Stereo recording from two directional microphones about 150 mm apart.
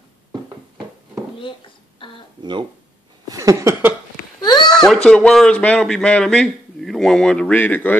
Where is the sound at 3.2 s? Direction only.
20° right (ahead or behind).